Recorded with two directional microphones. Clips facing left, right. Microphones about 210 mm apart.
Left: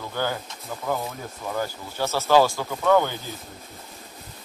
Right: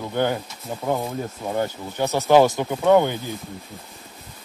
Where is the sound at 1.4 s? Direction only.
25° right (ahead or behind).